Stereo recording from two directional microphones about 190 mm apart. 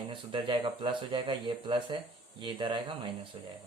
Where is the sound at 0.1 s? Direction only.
25° right (ahead or behind).